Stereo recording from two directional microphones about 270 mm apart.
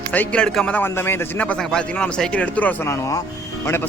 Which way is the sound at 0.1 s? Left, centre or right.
Centre.